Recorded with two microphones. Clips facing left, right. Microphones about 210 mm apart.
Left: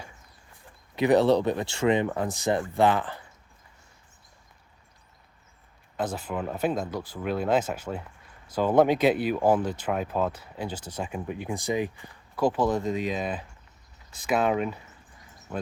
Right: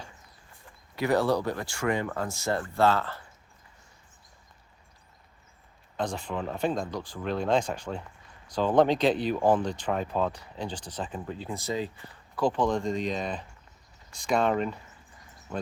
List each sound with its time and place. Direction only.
0.9 s speech: 20° left (ahead or behind)
6.0 s speech: 5° left (ahead or behind)